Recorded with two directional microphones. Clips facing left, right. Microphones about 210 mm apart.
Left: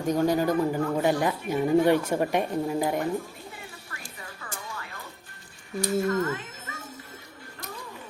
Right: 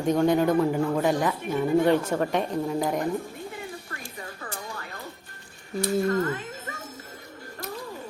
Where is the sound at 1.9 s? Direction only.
15° left (ahead or behind).